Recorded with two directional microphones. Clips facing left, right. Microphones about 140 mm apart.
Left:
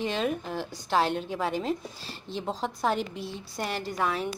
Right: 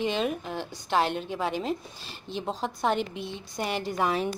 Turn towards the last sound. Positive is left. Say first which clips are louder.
# right 2 dB
turn(degrees=-20)  # may be behind; listen again after turning